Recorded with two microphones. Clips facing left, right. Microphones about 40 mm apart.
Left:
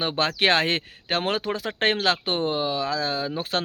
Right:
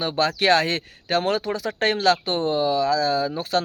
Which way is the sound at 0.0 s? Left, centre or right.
Left.